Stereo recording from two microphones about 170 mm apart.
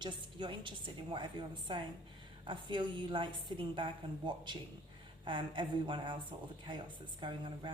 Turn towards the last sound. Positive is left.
turn(degrees=-30)  # may be behind; listen again after turning